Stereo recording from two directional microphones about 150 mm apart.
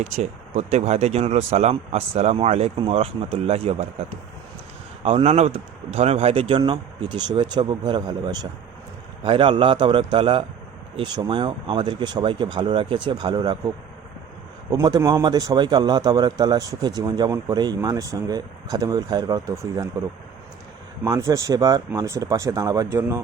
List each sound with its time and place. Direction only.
0.0 s speech: 45° right (ahead or behind)
5.0 s speech: 40° right (ahead or behind)
14.7 s a man's voice: 25° right (ahead or behind)
21.0 s a man's voice: 25° right (ahead or behind)